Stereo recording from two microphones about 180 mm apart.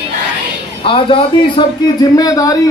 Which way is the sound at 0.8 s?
30° left (ahead or behind).